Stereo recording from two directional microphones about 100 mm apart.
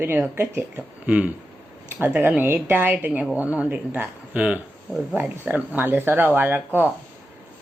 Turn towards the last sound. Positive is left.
turn(degrees=-20)  # may be behind; listen again after turning